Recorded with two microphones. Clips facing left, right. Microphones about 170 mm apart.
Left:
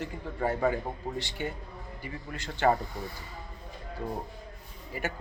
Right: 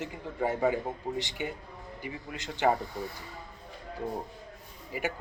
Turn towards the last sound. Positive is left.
turn(degrees=-10)  # may be behind; listen again after turning